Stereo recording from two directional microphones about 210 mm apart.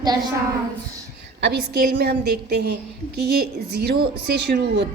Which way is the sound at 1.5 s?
50° right (ahead or behind).